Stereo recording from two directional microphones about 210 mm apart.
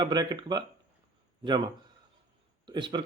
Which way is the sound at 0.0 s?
20° right (ahead or behind).